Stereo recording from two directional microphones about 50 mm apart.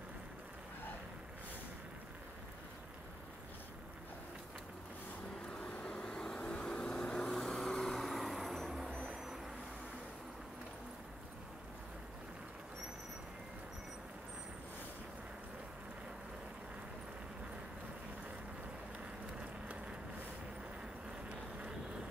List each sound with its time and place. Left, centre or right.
5.5 s vehicle: centre
21.3 s vehicle: right